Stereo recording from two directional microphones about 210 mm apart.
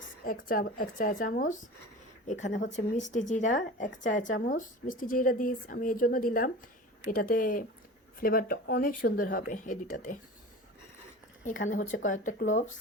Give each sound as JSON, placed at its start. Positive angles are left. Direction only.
{"t": 0.3, "sound": "speech", "side_deg": 40}
{"t": 11.7, "sound": "speech", "side_deg": 40}